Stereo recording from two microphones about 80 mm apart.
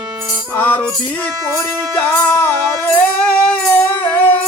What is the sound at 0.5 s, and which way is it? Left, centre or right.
Music, left.